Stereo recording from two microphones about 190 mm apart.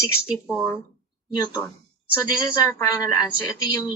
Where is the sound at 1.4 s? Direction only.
20° left (ahead or behind).